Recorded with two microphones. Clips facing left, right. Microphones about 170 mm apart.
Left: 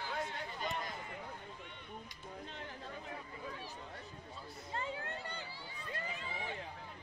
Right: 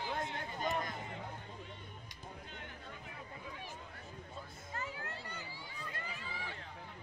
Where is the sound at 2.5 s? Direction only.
35° left (ahead or behind).